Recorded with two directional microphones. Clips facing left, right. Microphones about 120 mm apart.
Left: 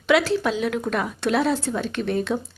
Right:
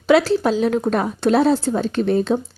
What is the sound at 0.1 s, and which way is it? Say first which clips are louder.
Speech: right 5 dB; 35° right (ahead or behind).